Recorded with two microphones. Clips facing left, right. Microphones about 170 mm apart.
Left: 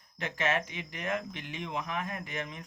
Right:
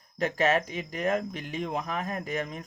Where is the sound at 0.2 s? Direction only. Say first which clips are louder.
Right 6 dB; 40° right (ahead or behind).